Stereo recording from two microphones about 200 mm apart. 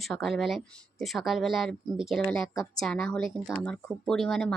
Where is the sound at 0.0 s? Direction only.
Centre (ahead or behind).